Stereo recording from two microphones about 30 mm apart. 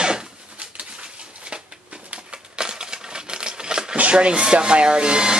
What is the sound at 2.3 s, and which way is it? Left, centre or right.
Typewriter, right.